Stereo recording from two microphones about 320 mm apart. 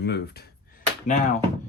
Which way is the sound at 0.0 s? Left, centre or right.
Left.